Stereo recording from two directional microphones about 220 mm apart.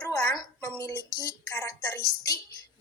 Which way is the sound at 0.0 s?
20° left (ahead or behind).